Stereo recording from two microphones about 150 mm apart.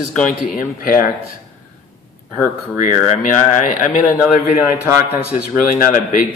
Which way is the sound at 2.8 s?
60° left (ahead or behind).